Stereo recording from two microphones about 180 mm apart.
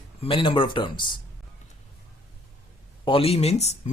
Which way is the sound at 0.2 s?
30° left (ahead or behind).